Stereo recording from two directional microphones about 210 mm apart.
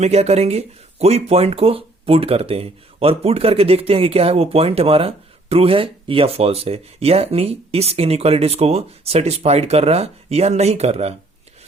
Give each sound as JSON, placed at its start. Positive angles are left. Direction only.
{"t": 0.0, "sound": "speech", "side_deg": -30}